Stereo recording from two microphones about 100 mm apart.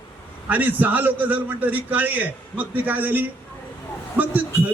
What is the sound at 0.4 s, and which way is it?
A man's voice, 15° right (ahead or behind).